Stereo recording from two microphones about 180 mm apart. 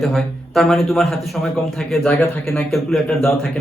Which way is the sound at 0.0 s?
Centre (ahead or behind).